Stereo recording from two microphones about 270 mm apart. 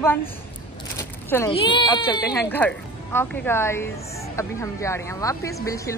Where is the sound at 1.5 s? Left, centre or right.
Centre.